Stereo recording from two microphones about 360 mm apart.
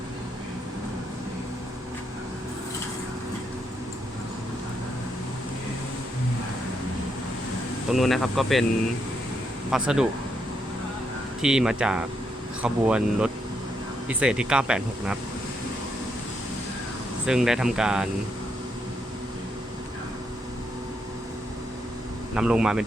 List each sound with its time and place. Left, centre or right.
7.9 s speech: centre
9.7 s speech: centre
11.4 s speech: centre
17.2 s speech: centre
22.4 s speech: centre